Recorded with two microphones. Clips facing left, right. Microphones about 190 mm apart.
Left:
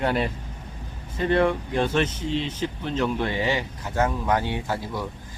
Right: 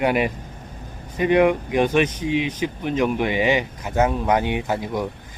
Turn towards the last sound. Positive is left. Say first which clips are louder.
# right 5 dB
turn(degrees=-20)  # may be behind; listen again after turning